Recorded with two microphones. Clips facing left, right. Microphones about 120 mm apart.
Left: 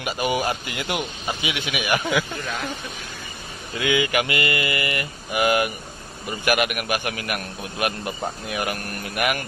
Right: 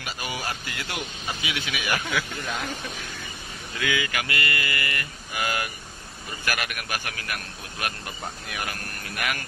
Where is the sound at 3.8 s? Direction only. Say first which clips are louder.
Left 7 dB; 20° left (ahead or behind).